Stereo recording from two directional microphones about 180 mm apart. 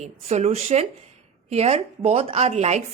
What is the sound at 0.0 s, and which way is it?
A woman's voice, 40° right (ahead or behind).